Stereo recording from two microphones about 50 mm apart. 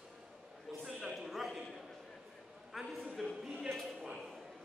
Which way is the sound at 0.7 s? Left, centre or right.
Centre.